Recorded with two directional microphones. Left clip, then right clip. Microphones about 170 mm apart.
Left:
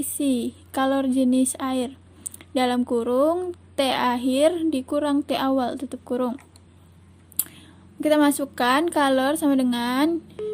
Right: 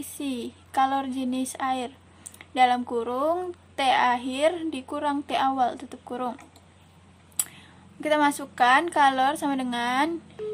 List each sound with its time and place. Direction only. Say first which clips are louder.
0.2 s speech: left 8 dB; 40° left (ahead or behind)
7.3 s a sound: right 1 dB; 35° left (ahead or behind)
8.0 s speech: left 3 dB; 40° left (ahead or behind)